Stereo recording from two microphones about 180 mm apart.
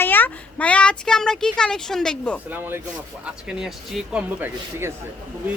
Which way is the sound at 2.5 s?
10° right (ahead or behind).